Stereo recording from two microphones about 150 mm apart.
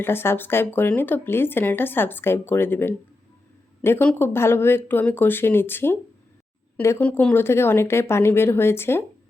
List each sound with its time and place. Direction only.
0.0 s speech: 15° left (ahead or behind)